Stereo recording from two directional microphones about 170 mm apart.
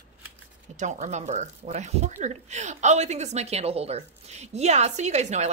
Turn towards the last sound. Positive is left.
turn(degrees=-40)  # may be behind; listen again after turning